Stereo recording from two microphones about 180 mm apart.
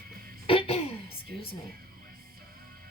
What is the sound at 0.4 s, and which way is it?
Throat clearing, 30° left (ahead or behind).